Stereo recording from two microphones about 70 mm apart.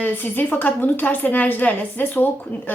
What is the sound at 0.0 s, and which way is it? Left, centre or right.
A woman's voice, left.